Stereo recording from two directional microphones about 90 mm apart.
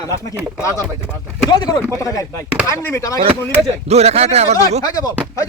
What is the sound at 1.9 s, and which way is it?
Speech, 35° left (ahead or behind).